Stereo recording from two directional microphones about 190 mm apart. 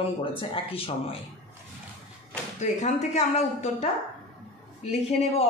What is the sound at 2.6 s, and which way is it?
A woman's voice, 40° left (ahead or behind).